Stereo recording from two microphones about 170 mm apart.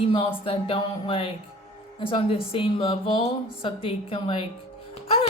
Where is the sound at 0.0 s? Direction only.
30° left (ahead or behind).